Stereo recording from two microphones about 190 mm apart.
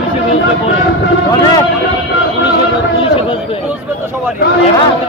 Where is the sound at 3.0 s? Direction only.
30° left (ahead or behind).